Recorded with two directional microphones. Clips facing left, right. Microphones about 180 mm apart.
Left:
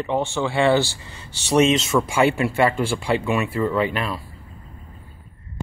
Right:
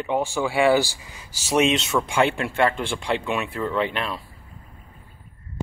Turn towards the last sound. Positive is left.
turn(degrees=5)  # may be behind; listen again after turning